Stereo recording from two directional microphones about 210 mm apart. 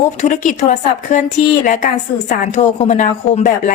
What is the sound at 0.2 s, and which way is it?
A woman's voice, 35° left (ahead or behind).